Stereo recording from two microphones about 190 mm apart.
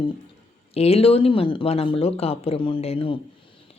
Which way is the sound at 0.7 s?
30° left (ahead or behind).